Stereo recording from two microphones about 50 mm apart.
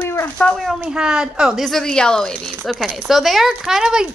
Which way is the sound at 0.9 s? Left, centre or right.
Centre.